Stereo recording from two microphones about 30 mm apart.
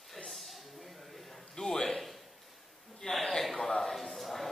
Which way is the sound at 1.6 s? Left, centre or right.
Centre.